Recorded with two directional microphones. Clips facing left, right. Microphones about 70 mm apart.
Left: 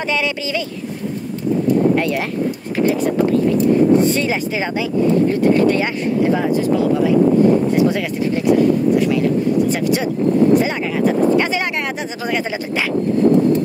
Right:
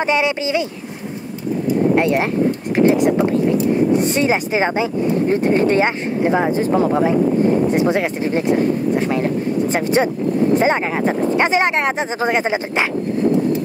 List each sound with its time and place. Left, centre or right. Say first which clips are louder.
0.0 s speech: right 3 dB; right
2.7 s speech: right 3 dB; right